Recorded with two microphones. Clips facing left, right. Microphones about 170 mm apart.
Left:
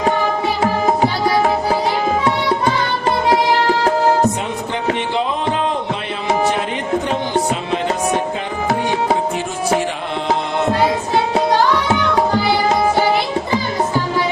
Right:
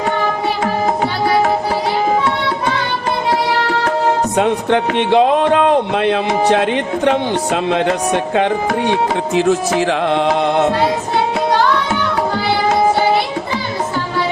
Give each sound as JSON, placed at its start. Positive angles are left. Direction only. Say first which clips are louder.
{"t": 4.4, "sound": "speech", "louder": "right 9 dB", "side_deg": -70}
{"t": 8.9, "sound": "music", "louder": "right 2 dB", "side_deg": -90}